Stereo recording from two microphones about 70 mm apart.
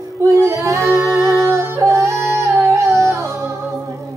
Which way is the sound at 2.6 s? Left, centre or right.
Right.